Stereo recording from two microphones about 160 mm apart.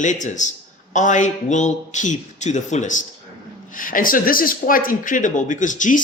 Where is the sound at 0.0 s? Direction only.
50° left (ahead or behind).